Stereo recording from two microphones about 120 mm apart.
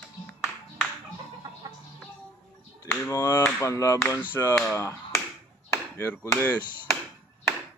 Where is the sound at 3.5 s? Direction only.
25° left (ahead or behind).